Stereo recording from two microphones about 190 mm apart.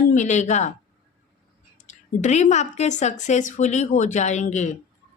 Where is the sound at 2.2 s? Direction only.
40° left (ahead or behind).